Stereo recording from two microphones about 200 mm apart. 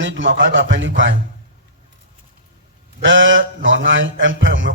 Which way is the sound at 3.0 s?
70° right (ahead or behind).